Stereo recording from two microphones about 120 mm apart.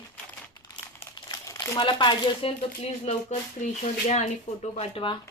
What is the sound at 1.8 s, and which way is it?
Speech, 45° left (ahead or behind).